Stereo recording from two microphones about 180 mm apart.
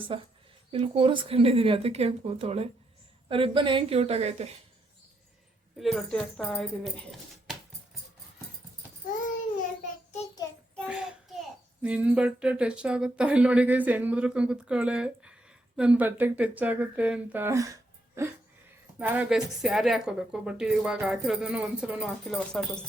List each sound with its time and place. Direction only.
0.1 s speech: 30° right (ahead or behind)
5.8 s a woman's voice: centre (ahead or behind)
10.8 s child singing: 5° right (ahead or behind)
11.8 s speech: 5° right (ahead or behind)
18.9 s a woman's voice: 10° right (ahead or behind)